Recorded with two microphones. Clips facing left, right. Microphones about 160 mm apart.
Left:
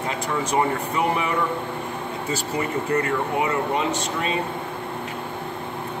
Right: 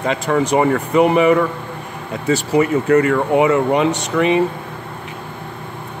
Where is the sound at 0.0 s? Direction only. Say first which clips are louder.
Right 8 dB; 75° right (ahead or behind).